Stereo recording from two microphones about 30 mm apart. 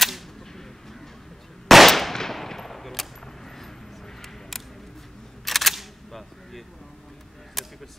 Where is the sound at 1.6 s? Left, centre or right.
Centre.